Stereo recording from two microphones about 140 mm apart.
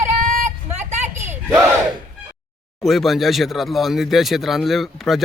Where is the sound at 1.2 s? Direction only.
20° right (ahead or behind).